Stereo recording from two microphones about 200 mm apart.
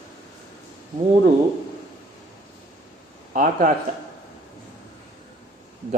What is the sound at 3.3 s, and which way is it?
Speech, 45° right (ahead or behind).